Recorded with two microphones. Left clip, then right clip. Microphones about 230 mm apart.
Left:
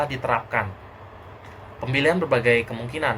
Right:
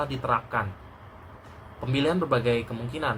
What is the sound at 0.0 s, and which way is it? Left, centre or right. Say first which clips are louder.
Speech: left 3 dB; centre.